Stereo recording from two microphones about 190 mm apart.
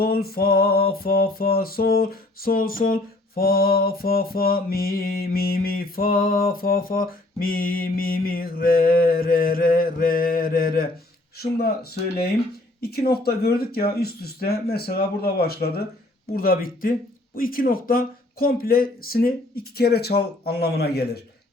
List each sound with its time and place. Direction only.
0.0 s music: 55° left (ahead or behind)
11.3 s speech: 55° left (ahead or behind)
16.3 s music: 50° left (ahead or behind)